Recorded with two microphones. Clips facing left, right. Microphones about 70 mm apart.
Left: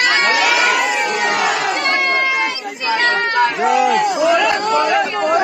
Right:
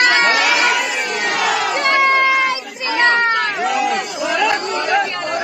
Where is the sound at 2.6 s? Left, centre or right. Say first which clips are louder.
Left 4 dB; left.